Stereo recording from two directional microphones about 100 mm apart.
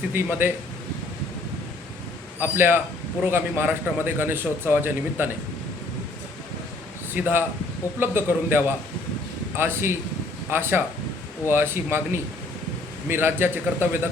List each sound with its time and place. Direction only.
0.1 s a man's voice: 20° right (ahead or behind)
2.4 s a man's voice: 20° right (ahead or behind)
7.1 s a man's voice: 20° right (ahead or behind)
13.1 s a man's voice: 20° right (ahead or behind)